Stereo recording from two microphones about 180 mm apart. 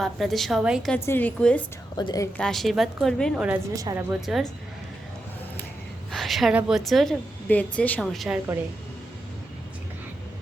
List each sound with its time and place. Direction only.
0.0 s a woman's voice: centre (ahead or behind)
0.9 s a woman's voice: 10° left (ahead or behind)
2.0 s a woman's voice: 20° left (ahead or behind)
2.4 s a woman's voice: centre (ahead or behind)
6.1 s a woman's voice: centre (ahead or behind)